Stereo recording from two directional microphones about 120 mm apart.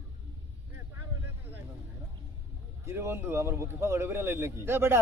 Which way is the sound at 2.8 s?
20° right (ahead or behind).